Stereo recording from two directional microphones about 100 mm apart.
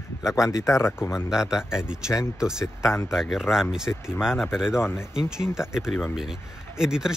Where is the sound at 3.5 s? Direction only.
5° right (ahead or behind).